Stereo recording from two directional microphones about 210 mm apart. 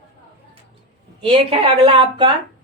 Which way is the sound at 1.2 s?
25° right (ahead or behind).